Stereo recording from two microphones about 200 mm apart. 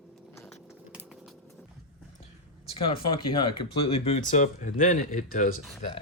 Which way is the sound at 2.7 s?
25° left (ahead or behind).